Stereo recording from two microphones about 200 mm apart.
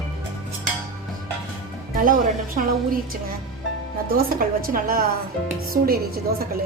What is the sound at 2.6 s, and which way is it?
A woman's voice, 45° right (ahead or behind).